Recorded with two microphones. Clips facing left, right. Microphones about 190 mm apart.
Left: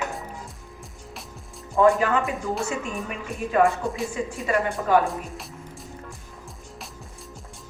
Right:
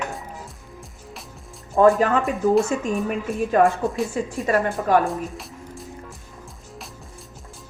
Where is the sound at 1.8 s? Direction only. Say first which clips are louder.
Right 3 dB; 40° right (ahead or behind).